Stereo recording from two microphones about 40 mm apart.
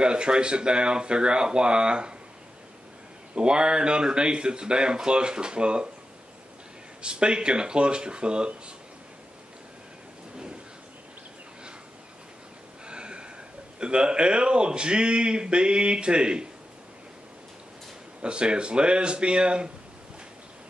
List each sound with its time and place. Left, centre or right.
0.0 s a man's voice: right
3.3 s a man's voice: right
7.0 s a man's voice: right
10.3 s a sound: right
12.8 s a sound: right
13.7 s a man's voice: right
18.2 s a man's voice: right